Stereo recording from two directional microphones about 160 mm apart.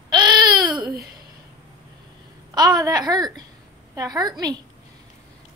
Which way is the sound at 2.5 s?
25° right (ahead or behind).